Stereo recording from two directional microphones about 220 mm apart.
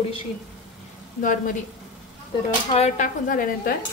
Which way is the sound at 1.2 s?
40° left (ahead or behind).